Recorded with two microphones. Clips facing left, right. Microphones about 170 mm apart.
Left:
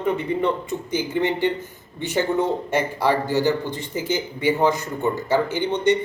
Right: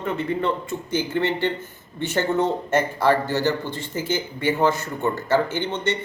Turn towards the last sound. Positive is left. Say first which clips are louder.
# left 5 dB
turn(degrees=15)  # may be behind; listen again after turning